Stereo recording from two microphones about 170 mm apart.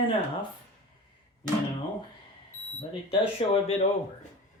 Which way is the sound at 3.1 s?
35° left (ahead or behind).